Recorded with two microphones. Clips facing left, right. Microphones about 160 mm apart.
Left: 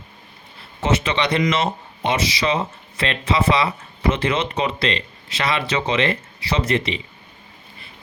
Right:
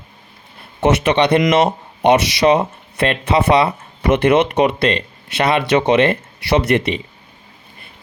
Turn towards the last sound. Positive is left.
turn(degrees=-55)  # may be behind; listen again after turning